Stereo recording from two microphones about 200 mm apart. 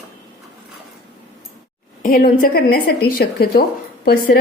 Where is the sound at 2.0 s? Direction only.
45° left (ahead or behind).